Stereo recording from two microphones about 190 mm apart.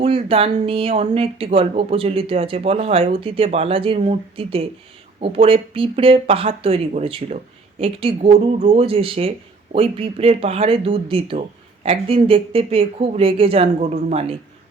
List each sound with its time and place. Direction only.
0.0 s speech: 30° right (ahead or behind)